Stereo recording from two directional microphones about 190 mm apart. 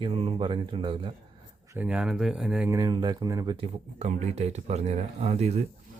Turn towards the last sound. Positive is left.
turn(degrees=-35)  # may be behind; listen again after turning